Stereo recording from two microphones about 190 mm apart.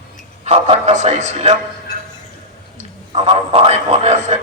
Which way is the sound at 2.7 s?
35° right (ahead or behind).